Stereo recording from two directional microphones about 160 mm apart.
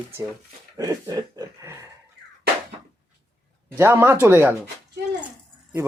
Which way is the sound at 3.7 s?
15° right (ahead or behind).